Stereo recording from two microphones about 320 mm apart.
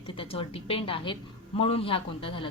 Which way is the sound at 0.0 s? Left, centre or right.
Centre.